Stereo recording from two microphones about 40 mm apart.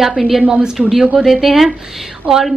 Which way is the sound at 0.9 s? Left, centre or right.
Centre.